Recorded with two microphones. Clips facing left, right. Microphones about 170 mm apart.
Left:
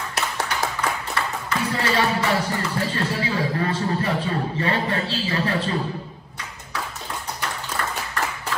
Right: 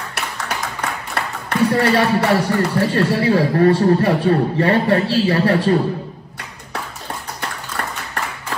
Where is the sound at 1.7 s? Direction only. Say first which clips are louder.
Right 5 dB; 65° right (ahead or behind).